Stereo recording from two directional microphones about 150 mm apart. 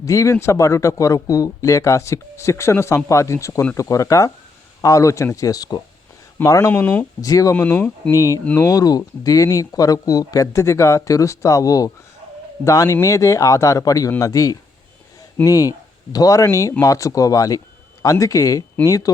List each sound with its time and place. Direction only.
0.0 s speech: 20° left (ahead or behind)
7.2 s speech: 25° left (ahead or behind)
7.5 s speech: 10° left (ahead or behind)